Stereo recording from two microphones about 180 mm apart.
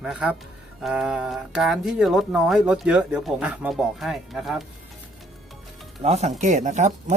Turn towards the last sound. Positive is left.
turn(degrees=-40)  # may be behind; listen again after turning